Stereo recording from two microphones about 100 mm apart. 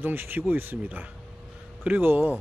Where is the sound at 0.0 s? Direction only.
20° right (ahead or behind).